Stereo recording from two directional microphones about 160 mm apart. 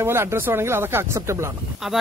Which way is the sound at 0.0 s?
15° right (ahead or behind).